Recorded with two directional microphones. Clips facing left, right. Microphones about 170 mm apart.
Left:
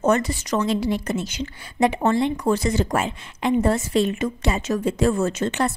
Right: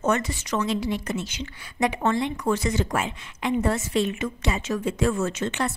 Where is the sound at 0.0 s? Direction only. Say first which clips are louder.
Left 4 dB; 35° left (ahead or behind).